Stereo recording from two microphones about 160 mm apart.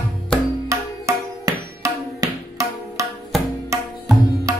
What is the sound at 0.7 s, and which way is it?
Music, 20° right (ahead or behind).